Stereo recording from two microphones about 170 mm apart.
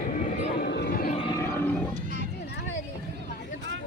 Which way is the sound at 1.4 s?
10° left (ahead or behind).